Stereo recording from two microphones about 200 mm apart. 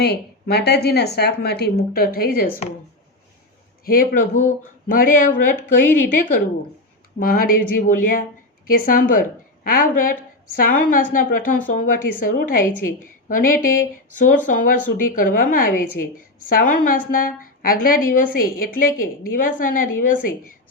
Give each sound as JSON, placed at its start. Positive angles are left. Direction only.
{"t": 0.0, "sound": "a woman's voice", "side_deg": 55}
{"t": 3.8, "sound": "a man's voice", "side_deg": 45}
{"t": 7.2, "sound": "a woman's voice", "side_deg": 45}